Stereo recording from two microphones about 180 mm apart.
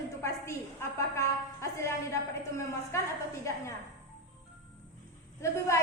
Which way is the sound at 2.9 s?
15° left (ahead or behind).